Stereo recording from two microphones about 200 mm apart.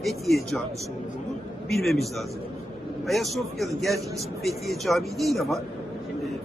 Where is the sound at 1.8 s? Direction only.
Centre (ahead or behind).